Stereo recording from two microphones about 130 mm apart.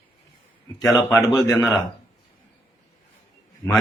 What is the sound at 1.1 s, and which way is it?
Speech, 20° left (ahead or behind).